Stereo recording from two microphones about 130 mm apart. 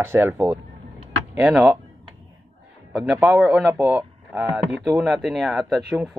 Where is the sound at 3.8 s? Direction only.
5° right (ahead or behind).